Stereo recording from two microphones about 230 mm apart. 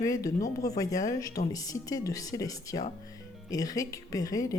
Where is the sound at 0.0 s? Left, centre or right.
Centre.